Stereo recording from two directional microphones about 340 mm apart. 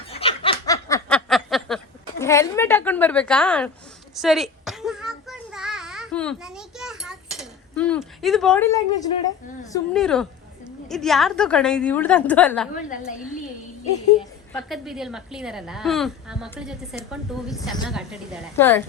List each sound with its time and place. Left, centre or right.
0.1 s a sound: centre
9.7 s a woman's voice: centre
13.9 s speech: centre
14.7 s a woman's voice: centre